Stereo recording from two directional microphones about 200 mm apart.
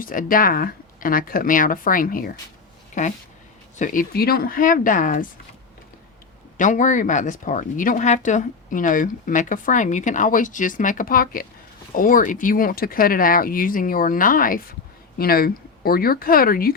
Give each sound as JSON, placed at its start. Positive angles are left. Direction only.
{"t": 0.0, "sound": "speech", "side_deg": 45}
{"t": 6.6, "sound": "speech", "side_deg": 40}